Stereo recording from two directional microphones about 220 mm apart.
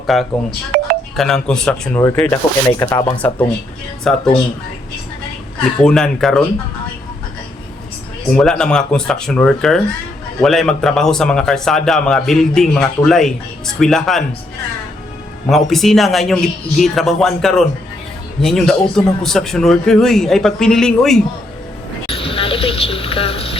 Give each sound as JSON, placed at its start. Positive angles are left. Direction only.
{"t": 0.1, "sound": "a man's voice", "side_deg": 0}
{"t": 0.7, "sound": "telephone dialing", "side_deg": -40}
{"t": 1.1, "sound": "a man's voice", "side_deg": 0}
{"t": 5.8, "sound": "a man's voice", "side_deg": 0}
{"t": 8.4, "sound": "a man's voice", "side_deg": 5}
{"t": 15.4, "sound": "a man's voice", "side_deg": 0}
{"t": 22.0, "sound": "a sound", "side_deg": 25}